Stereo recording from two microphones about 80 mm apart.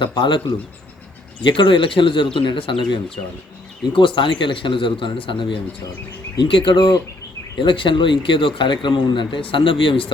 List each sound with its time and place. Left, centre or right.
0.0 s speech: left
1.5 s speech: left
7.6 s speech: left